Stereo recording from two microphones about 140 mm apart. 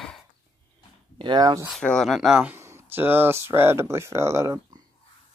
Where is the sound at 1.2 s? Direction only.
30° right (ahead or behind).